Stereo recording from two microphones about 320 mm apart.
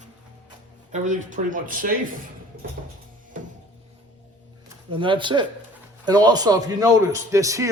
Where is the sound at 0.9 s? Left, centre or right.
Right.